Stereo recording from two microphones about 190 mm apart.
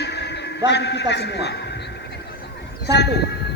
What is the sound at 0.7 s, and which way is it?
Speech, 65° left (ahead or behind).